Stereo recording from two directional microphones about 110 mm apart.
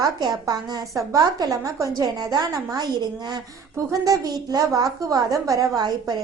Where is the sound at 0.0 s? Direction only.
40° right (ahead or behind).